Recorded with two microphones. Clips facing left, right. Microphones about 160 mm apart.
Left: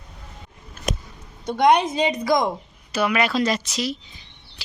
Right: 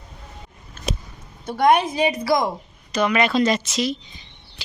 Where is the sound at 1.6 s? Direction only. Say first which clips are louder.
Even; 5° right (ahead or behind).